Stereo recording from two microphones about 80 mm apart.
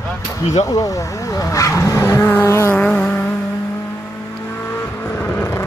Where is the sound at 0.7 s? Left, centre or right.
Left.